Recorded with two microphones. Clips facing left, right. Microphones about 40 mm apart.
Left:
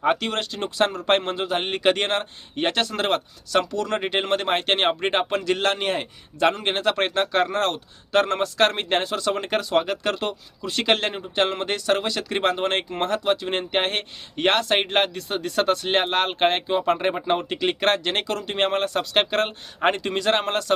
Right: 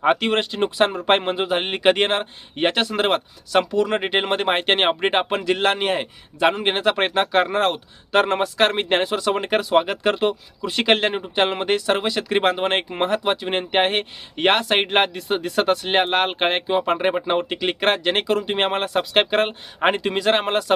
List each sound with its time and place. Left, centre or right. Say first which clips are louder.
0.0 s speech: right 4 dB; right